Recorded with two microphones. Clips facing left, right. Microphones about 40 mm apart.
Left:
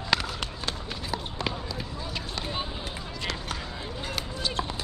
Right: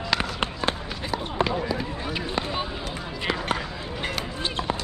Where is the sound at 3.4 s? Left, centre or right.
Right.